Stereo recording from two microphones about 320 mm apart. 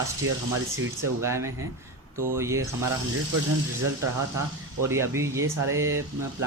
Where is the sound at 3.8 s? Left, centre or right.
Right.